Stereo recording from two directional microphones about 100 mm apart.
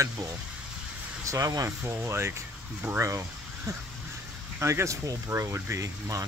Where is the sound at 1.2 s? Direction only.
35° right (ahead or behind).